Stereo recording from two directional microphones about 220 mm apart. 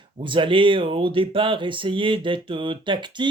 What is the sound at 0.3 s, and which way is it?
Speech, 25° right (ahead or behind).